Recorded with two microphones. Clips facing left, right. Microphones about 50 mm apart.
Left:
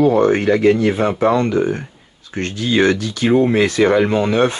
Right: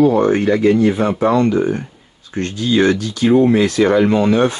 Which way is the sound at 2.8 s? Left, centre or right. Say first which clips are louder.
Even; centre.